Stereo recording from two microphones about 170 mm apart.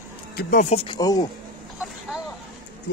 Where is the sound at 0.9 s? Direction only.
20° left (ahead or behind).